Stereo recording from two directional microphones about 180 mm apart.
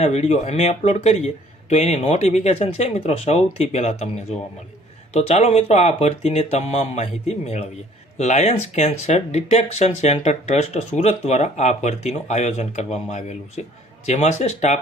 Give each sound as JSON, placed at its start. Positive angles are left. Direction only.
{"t": 0.0, "sound": "speech", "side_deg": 35}
{"t": 5.1, "sound": "speech", "side_deg": 35}